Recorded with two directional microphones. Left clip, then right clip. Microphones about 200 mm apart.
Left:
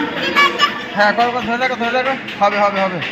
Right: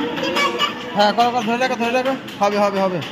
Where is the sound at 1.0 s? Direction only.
35° right (ahead or behind).